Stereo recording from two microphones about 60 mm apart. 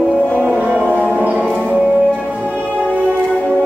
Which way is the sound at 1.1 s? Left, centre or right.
Right.